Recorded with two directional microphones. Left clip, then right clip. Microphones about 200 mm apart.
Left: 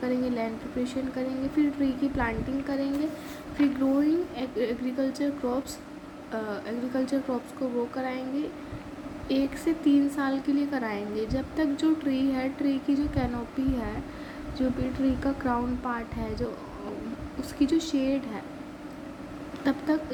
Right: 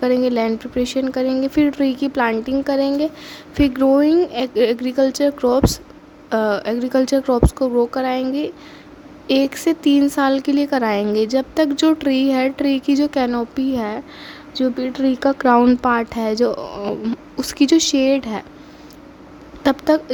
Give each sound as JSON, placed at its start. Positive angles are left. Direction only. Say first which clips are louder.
{"t": 0.0, "sound": "a woman's voice", "louder": "right 12 dB", "side_deg": -55}
{"t": 19.6, "sound": "a woman's voice", "louder": "right 12 dB", "side_deg": -50}